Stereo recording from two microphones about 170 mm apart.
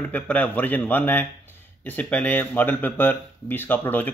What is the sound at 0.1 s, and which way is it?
Speech, 10° left (ahead or behind).